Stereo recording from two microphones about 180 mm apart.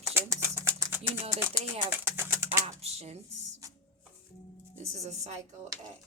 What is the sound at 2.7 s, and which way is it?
Speech, 35° right (ahead or behind).